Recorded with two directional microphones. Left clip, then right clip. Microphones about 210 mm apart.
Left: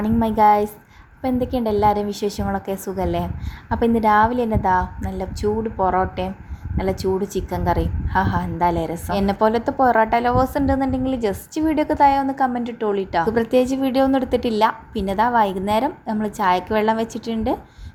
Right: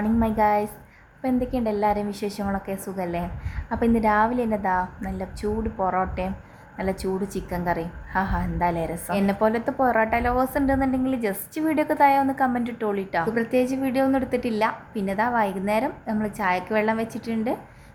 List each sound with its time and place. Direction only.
0.0 s a woman's voice: 15° left (ahead or behind)